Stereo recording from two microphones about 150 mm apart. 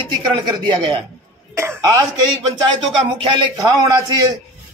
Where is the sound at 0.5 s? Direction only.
30° right (ahead or behind).